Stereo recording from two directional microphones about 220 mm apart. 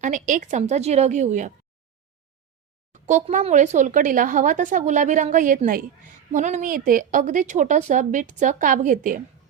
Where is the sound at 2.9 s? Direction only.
30° right (ahead or behind).